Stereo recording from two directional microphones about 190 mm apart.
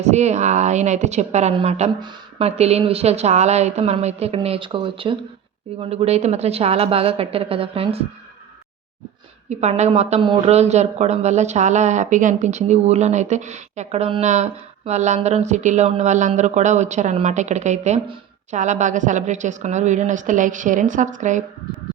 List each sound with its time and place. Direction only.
0.0 s a woman's voice: 35° right (ahead or behind)
9.5 s a woman's voice: 35° right (ahead or behind)